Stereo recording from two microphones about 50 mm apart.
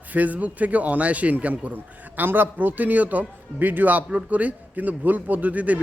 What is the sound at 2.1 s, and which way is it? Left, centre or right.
Speech, right.